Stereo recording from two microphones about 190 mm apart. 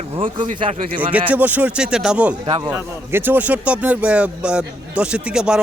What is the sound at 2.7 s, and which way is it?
Speech, 10° right (ahead or behind).